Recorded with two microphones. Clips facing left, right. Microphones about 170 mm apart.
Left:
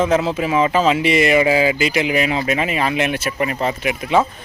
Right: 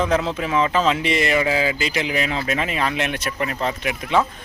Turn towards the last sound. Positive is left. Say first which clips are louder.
# left 3 dB
turn(degrees=5)  # may be behind; listen again after turning